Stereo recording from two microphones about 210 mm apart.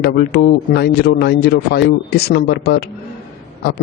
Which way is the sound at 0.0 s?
50° left (ahead or behind).